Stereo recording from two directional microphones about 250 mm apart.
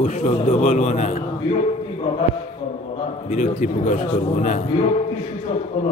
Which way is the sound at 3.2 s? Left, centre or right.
Left.